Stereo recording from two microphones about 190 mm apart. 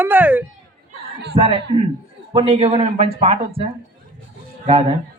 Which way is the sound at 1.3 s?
30° right (ahead or behind).